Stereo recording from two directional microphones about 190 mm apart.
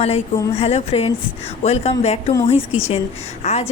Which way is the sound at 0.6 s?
30° left (ahead or behind).